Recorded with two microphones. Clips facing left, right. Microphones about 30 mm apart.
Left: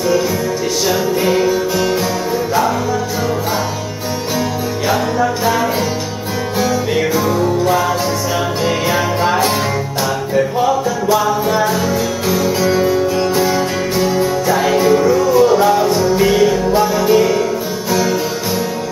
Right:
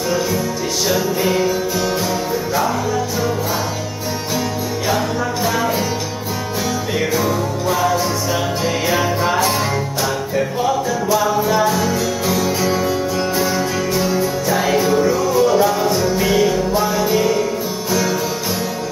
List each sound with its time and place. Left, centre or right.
0.9 s music: centre
4.8 s music: centre
7.0 s music: centre
8.9 s music: centre
15.3 s music: left